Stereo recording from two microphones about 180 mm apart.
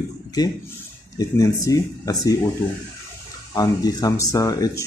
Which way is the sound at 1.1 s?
20° left (ahead or behind).